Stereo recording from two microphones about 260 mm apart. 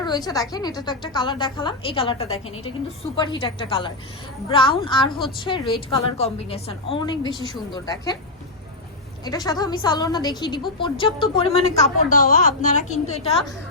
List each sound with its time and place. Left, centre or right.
0.0 s a woman's voice: centre
9.2 s a woman's voice: centre